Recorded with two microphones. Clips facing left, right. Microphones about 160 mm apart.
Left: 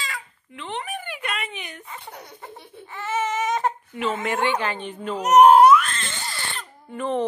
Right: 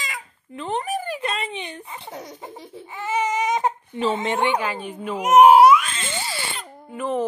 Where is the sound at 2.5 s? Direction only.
90° right.